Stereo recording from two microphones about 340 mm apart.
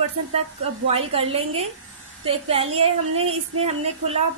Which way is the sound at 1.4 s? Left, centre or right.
Right.